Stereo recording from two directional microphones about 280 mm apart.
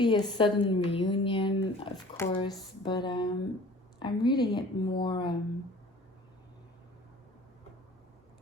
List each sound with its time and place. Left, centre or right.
0.0 s a woman's voice: centre